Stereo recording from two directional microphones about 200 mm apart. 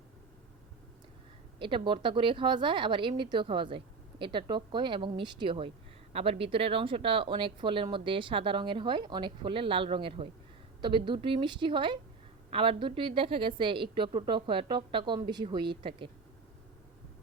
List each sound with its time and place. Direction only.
1.5 s a woman's voice: 25° right (ahead or behind)